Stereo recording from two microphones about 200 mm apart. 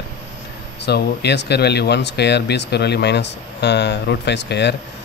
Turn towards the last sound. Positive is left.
turn(degrees=60)  # may be behind; listen again after turning